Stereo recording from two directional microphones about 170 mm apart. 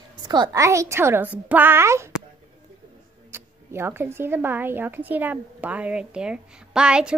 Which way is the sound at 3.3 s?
15° right (ahead or behind).